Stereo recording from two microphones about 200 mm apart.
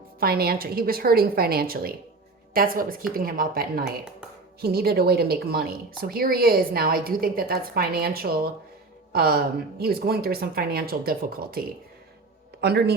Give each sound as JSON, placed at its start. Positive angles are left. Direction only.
{"t": 0.2, "sound": "a woman's voice", "side_deg": -50}